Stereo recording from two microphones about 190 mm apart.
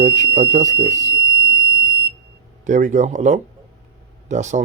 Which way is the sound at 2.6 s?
40° right (ahead or behind).